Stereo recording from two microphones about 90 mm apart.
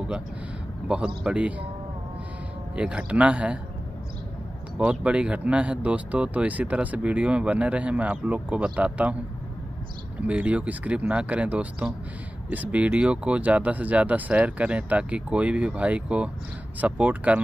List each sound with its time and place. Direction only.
0.8 s speech: 10° right (ahead or behind)
2.7 s speech: 10° right (ahead or behind)
4.7 s speech: 10° right (ahead or behind)
10.2 s speech: 15° right (ahead or behind)